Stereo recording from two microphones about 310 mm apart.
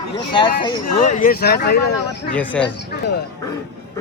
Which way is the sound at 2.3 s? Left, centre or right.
Centre.